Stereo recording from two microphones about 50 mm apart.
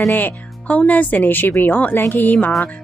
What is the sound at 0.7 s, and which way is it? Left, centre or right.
Speech, left.